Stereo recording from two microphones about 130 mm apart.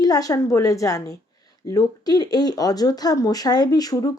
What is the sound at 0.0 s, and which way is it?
Speech, 30° left (ahead or behind).